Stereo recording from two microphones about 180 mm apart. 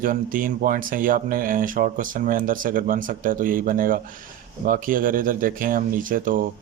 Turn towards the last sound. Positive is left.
turn(degrees=-50)  # may be behind; listen again after turning